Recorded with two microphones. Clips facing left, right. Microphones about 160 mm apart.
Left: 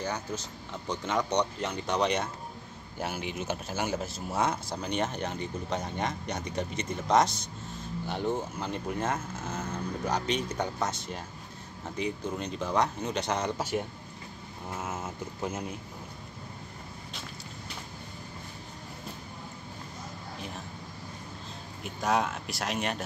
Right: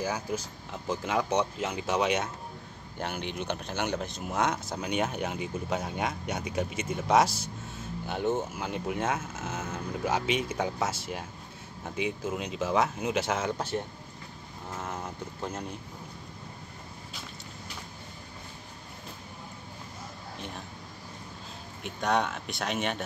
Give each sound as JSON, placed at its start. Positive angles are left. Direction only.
{"t": 0.0, "sound": "speech", "side_deg": -10}
{"t": 13.6, "sound": "speech", "side_deg": 10}
{"t": 21.8, "sound": "speech", "side_deg": 0}